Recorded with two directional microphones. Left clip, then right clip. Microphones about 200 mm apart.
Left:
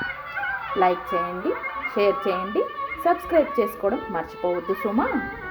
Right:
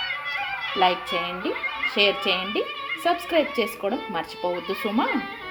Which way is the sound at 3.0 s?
15° right (ahead or behind).